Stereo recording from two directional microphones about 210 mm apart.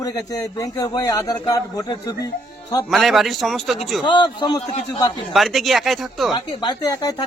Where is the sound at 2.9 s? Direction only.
Centre (ahead or behind).